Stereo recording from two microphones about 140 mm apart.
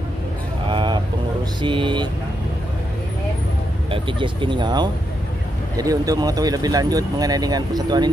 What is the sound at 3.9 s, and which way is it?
Speech, 35° right (ahead or behind).